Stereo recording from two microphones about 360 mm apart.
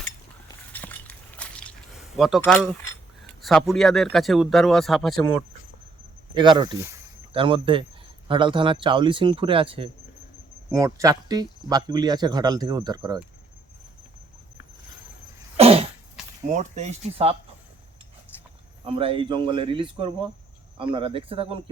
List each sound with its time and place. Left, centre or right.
0.7 s a sound: centre
2.1 s speech: centre
6.3 s speech: centre
15.5 s cough: centre
16.6 s speech: centre
18.9 s speech: centre